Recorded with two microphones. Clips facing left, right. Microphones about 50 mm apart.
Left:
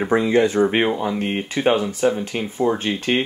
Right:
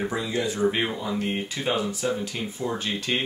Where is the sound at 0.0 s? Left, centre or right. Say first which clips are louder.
Left 10 dB; left.